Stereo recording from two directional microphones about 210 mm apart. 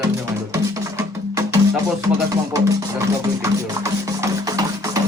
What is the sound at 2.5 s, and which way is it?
Music, 15° right (ahead or behind).